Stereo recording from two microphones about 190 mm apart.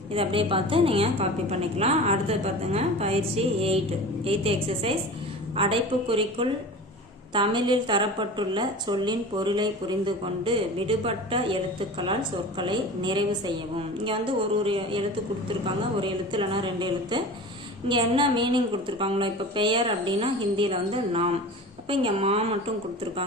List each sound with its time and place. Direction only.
0.1 s a woman's voice: 30° right (ahead or behind)
14.6 s a woman's voice: 30° right (ahead or behind)